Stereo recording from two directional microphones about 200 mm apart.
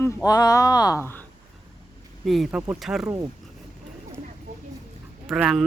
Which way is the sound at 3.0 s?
15° right (ahead or behind).